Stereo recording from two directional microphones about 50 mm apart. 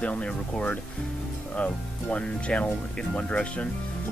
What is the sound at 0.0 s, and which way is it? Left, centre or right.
Speech, left.